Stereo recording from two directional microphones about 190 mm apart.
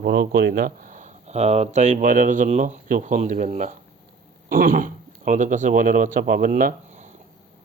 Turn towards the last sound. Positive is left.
turn(degrees=-40)  # may be behind; listen again after turning